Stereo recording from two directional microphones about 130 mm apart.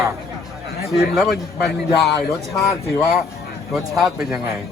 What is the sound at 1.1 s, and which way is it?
Speech, centre (ahead or behind).